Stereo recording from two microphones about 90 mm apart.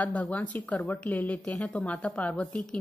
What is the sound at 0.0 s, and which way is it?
A woman's voice, 15° left (ahead or behind).